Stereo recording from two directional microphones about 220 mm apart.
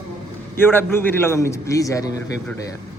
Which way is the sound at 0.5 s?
10° left (ahead or behind).